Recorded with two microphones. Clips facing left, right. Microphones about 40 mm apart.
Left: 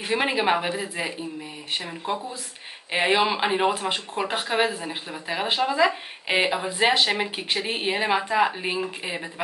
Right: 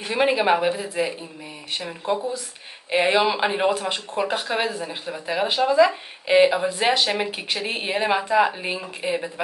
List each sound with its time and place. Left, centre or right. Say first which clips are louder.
0.1 s speech: right 3 dB; centre
5.5 s speech: right 4 dB; centre